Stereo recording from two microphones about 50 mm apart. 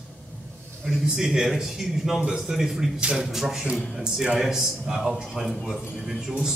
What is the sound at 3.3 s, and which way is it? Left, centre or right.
A man's voice, centre.